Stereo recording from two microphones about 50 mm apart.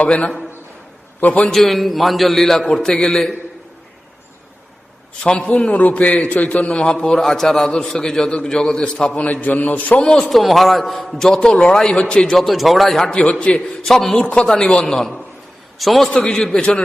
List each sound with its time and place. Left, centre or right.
0.1 s a man's voice: left
1.6 s a man's voice: centre
5.2 s a man's voice: centre
10.0 s a man's voice: centre
10.2 s a man's voice: centre
11.3 s a man's voice: centre
12.4 s a man's voice: centre
13.1 s a man's voice: centre
13.8 s a man's voice: centre
14.6 s a man's voice: centre
15.8 s a man's voice: centre
16.0 s a man's voice: centre